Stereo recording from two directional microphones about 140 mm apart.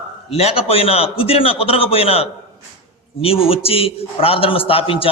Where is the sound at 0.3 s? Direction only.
45° left (ahead or behind).